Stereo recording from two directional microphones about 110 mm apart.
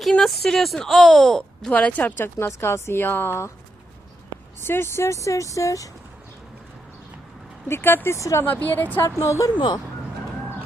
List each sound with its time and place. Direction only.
0.0 s speech: centre (ahead or behind); by 3.5 s 25° left (ahead or behind)
4.6 s speech: 20° left (ahead or behind)
7.7 s speech: 20° left (ahead or behind)
9.0 s speech: 30° left (ahead or behind)
9.6 s speech: 45° left (ahead or behind)